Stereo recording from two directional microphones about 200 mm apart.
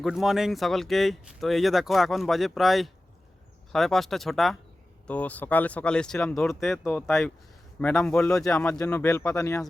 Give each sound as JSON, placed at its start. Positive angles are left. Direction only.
{"t": 0.0, "sound": "speech", "side_deg": 0}